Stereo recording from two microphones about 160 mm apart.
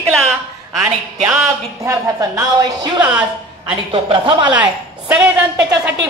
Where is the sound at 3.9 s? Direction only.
30° right (ahead or behind).